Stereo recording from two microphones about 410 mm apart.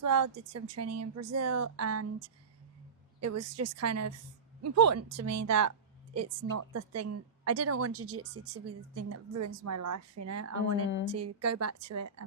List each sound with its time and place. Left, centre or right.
0.0 s a woman's voice: right